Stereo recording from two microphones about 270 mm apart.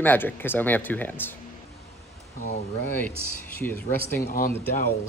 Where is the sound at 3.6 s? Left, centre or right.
Centre.